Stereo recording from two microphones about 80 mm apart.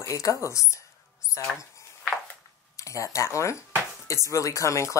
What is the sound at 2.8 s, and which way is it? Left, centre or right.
Speech, left.